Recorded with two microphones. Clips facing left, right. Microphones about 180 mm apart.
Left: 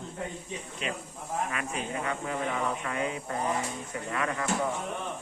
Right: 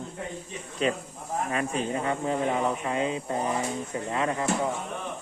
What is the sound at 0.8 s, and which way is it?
Speech, 35° right (ahead or behind).